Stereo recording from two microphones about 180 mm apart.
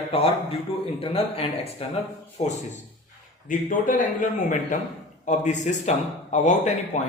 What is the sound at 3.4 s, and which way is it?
Speech, 45° left (ahead or behind).